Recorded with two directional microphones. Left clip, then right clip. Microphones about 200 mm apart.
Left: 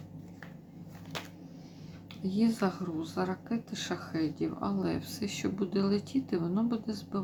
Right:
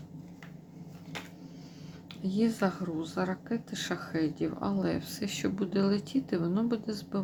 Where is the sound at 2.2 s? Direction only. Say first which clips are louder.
Right 1 dB; 15° right (ahead or behind).